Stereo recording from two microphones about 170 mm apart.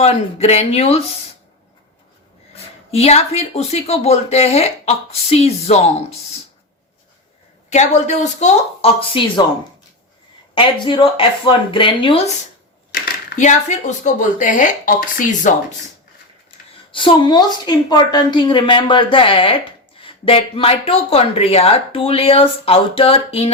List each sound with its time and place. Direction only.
0.0 s a woman's voice: 40° left (ahead or behind)
2.9 s a woman's voice: 40° left (ahead or behind)
7.7 s speech: 45° left (ahead or behind)
10.5 s speech: 30° left (ahead or behind)
12.9 s speech: 50° left (ahead or behind)
16.9 s a woman's voice: 30° left (ahead or behind)